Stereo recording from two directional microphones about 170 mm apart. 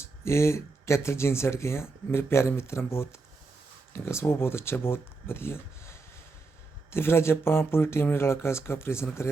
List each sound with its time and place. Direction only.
0.0 s speech: 15° left (ahead or behind)